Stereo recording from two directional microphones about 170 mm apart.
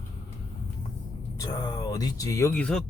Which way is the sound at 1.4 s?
25° left (ahead or behind).